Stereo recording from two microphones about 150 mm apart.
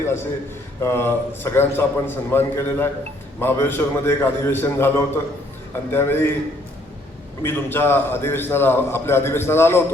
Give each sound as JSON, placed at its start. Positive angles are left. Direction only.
{"t": 0.8, "sound": "a man's voice", "side_deg": 15}
{"t": 7.4, "sound": "a man's voice", "side_deg": 15}